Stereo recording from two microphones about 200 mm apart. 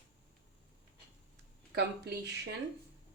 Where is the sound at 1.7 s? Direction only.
55° right (ahead or behind).